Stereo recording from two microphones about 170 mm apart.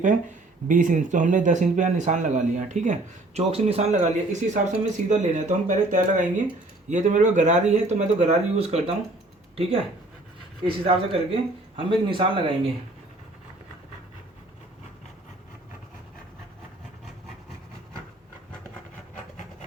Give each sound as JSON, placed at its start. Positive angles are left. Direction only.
{"t": 0.7, "sound": "speech", "side_deg": -50}
{"t": 10.7, "sound": "speech", "side_deg": -35}